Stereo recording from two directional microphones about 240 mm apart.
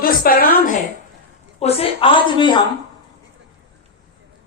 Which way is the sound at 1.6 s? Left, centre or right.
Left.